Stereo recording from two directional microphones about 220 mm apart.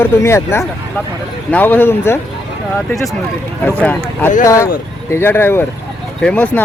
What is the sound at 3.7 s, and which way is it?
Speech, 5° left (ahead or behind).